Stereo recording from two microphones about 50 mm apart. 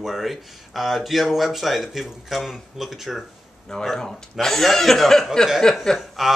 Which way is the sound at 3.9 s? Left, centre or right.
Centre.